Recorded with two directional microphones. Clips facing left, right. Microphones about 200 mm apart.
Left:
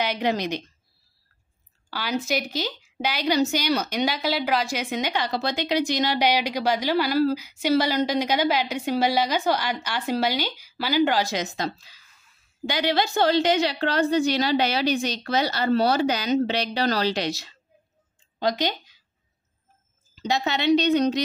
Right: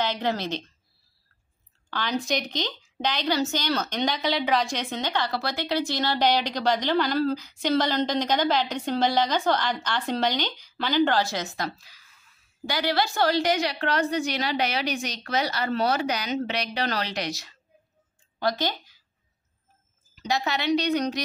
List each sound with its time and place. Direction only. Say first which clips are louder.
0.0 s a woman's voice: left 2 dB; 15° left (ahead or behind)
1.9 s a woman's voice: left 1 dB; 5° left (ahead or behind)
20.2 s a woman's voice: left 2 dB; 25° left (ahead or behind)